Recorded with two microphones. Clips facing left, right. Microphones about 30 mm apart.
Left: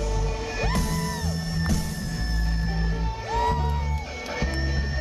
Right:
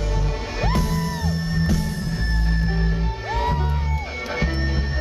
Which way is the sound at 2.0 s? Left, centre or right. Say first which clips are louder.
Right 5 dB; right.